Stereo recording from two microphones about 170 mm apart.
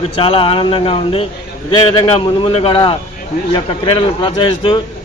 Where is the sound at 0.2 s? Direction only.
30° left (ahead or behind).